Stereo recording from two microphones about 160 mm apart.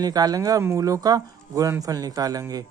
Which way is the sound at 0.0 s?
25° right (ahead or behind).